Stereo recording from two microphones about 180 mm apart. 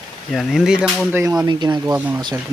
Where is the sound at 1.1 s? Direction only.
15° right (ahead or behind).